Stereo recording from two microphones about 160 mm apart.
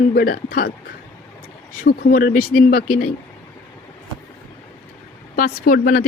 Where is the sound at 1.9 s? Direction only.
60° left (ahead or behind).